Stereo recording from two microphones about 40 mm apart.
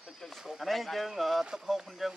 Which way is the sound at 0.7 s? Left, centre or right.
Centre.